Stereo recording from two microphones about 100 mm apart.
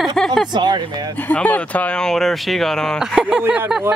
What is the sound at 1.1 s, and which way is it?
Speech, 15° left (ahead or behind).